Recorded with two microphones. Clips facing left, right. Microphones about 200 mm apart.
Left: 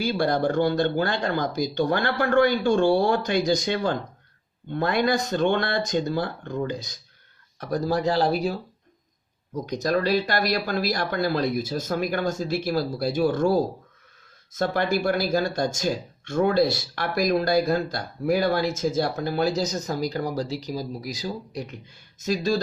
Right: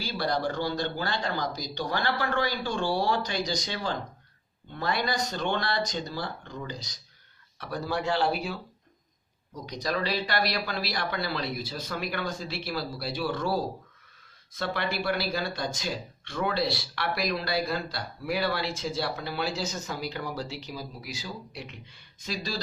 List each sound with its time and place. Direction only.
0.0 s speech: 50° left (ahead or behind)
7.6 s speech: 40° left (ahead or behind)
9.6 s speech: 45° left (ahead or behind)